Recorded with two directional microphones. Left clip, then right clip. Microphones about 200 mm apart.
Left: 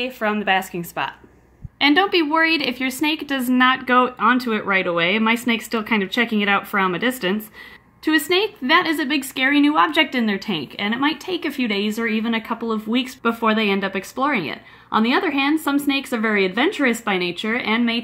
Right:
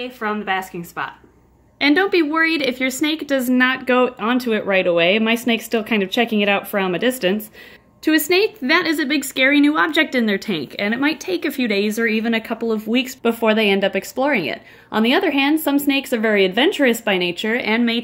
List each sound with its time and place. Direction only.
0.0 s a woman's voice: 40° left (ahead or behind)
1.8 s a woman's voice: 10° left (ahead or behind)